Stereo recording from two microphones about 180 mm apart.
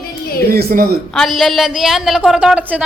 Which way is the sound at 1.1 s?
Centre (ahead or behind).